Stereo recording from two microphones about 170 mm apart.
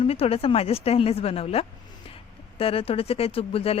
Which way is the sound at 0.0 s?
35° left (ahead or behind).